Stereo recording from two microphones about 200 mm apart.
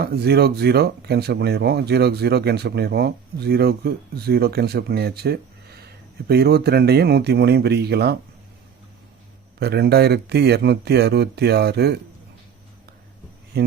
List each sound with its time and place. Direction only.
0.0 s speech: 55° right (ahead or behind)
9.6 s speech: 55° right (ahead or behind)
13.5 s speech: 50° right (ahead or behind)